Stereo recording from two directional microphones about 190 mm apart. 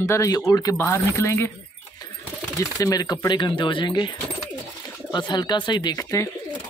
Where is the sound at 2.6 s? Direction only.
20° left (ahead or behind).